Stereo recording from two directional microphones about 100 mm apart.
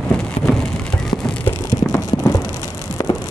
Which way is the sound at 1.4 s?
25° left (ahead or behind).